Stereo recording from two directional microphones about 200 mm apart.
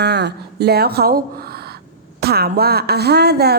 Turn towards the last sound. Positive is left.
turn(degrees=-55)  # may be behind; listen again after turning